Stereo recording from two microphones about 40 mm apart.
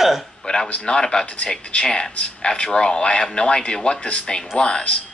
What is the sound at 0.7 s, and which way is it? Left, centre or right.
Speech, left.